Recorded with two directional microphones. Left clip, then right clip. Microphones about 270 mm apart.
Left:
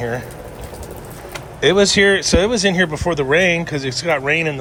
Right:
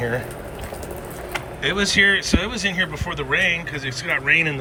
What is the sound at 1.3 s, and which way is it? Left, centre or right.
Speech, centre.